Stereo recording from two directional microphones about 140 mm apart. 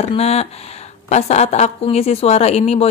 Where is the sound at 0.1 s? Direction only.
50° left (ahead or behind).